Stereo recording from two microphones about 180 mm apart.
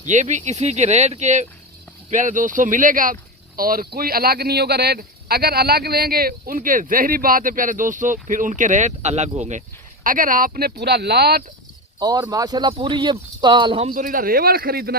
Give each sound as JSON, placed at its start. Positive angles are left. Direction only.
{"t": 0.0, "sound": "speech", "side_deg": -40}
{"t": 11.9, "sound": "speech", "side_deg": -25}
{"t": 13.9, "sound": "a man's voice", "side_deg": -50}